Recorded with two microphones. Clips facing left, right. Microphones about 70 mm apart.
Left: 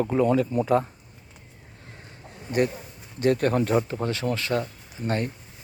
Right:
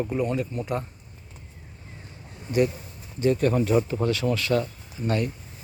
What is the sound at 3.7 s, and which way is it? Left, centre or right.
Speech, left.